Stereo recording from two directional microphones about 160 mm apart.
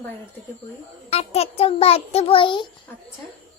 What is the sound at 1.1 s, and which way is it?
A child's voice, 40° left (ahead or behind).